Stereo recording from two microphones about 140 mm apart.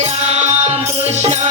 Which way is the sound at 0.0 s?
50° right (ahead or behind).